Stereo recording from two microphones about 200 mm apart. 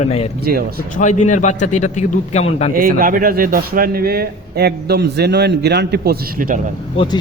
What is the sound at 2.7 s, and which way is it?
Speech, 45° right (ahead or behind).